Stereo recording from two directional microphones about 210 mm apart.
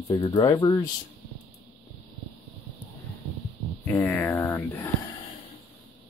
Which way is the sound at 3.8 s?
10° left (ahead or behind).